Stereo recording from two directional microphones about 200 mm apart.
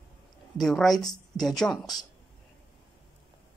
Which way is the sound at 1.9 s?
20° left (ahead or behind).